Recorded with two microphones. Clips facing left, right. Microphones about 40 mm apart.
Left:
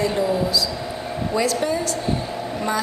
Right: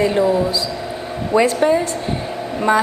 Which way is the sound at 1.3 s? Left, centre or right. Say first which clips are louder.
Right 8 dB; right.